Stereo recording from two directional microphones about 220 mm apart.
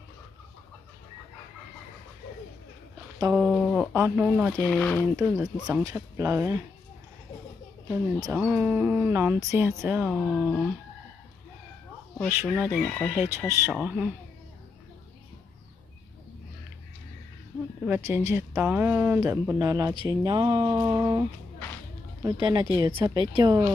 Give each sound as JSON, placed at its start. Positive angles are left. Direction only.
{"t": 3.3, "sound": "a sound", "side_deg": 0}
{"t": 3.9, "sound": "speech", "side_deg": -10}
{"t": 4.6, "sound": "speech", "side_deg": 5}
{"t": 7.9, "sound": "speech", "side_deg": -10}
{"t": 12.3, "sound": "speech", "side_deg": -10}
{"t": 12.7, "sound": "speech", "side_deg": 5}
{"t": 13.1, "sound": "speech", "side_deg": -10}
{"t": 17.8, "sound": "speech", "side_deg": -10}